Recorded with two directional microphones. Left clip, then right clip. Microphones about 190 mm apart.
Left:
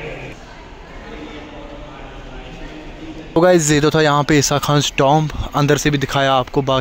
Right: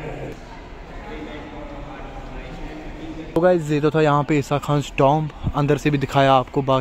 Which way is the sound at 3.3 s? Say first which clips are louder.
Left 5 dB; 25° left (ahead or behind).